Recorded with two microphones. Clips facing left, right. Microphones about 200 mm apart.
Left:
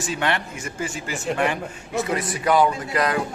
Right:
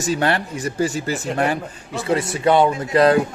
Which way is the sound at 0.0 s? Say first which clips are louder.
Right 5 dB; 40° right (ahead or behind).